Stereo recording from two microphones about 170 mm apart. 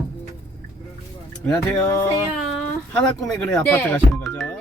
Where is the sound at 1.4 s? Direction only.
5° left (ahead or behind).